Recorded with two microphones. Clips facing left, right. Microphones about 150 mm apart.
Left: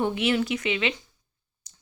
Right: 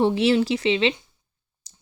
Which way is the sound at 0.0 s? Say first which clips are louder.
Right 5 dB; 30° right (ahead or behind).